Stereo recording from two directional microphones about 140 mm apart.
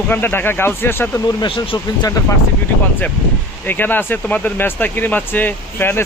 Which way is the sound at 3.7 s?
15° left (ahead or behind).